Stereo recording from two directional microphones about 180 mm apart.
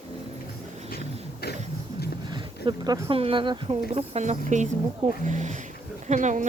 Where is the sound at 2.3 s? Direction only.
25° right (ahead or behind).